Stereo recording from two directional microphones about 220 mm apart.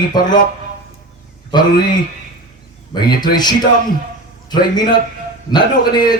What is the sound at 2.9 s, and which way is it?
A man's voice, 20° left (ahead or behind).